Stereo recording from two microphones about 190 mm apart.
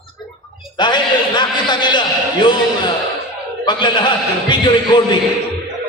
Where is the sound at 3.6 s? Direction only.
25° left (ahead or behind).